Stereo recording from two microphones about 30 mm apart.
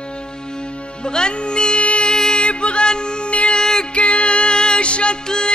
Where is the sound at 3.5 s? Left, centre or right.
Centre.